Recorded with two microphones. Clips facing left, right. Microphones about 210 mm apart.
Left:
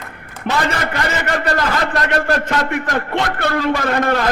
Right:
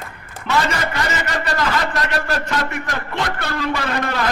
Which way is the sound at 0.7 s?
55° left (ahead or behind).